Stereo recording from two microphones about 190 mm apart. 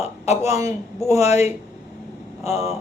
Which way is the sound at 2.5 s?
15° right (ahead or behind).